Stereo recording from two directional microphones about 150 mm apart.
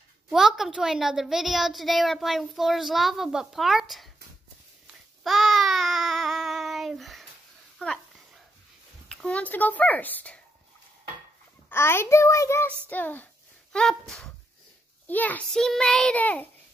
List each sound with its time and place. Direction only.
0.3 s a woman's voice: centre (ahead or behind)
5.2 s babbling: centre (ahead or behind)
7.8 s a child's voice: 5° left (ahead or behind)
9.1 s a child's voice: 5° left (ahead or behind)
11.7 s a child's voice: 15° left (ahead or behind)